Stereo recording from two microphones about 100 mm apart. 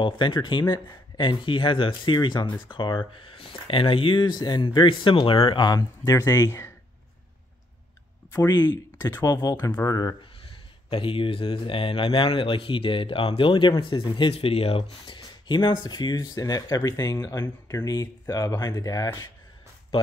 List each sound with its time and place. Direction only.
0.0 s speech: 50° left (ahead or behind)
5.7 s speech: 35° left (ahead or behind)
9.2 s speech: 40° left (ahead or behind)
10.9 s speech: 60° left (ahead or behind)
14.3 s speech: 75° left (ahead or behind); by 19.2 s 35° left (ahead or behind)